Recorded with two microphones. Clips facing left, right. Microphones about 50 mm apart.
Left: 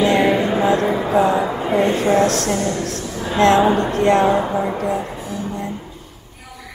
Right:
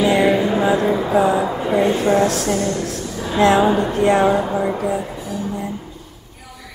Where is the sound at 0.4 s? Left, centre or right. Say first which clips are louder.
Even; centre.